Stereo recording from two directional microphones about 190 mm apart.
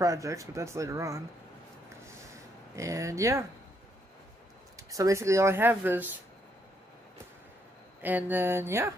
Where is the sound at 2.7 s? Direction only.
15° right (ahead or behind).